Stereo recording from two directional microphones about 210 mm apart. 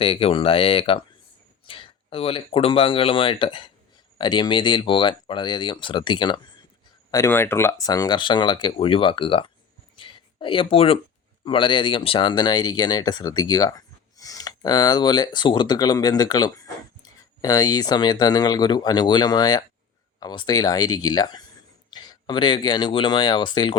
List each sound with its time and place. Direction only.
0.0 s speech: 25° left (ahead or behind)
9.9 s a sound: 25° left (ahead or behind)
11.4 s speech: 25° left (ahead or behind)